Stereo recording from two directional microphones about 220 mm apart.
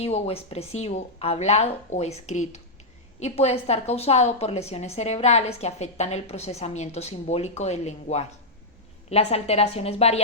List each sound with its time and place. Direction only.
0.0 s a woman's voice: 25° left (ahead or behind)